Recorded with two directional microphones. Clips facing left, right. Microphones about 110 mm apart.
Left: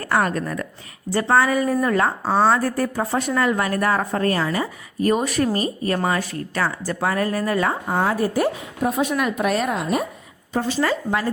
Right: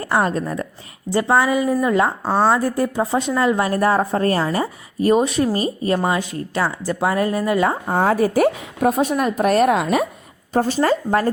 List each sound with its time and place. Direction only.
0.0 s speech: 20° right (ahead or behind)
1.1 s a woman's voice: 15° right (ahead or behind)
2.5 s speech: 20° right (ahead or behind)
8.2 s a woman's voice: 70° right (ahead or behind)
8.9 s a woman's voice: 40° right (ahead or behind)
9.6 s a woman's voice: 75° right (ahead or behind)
10.5 s a woman's voice: 45° right (ahead or behind)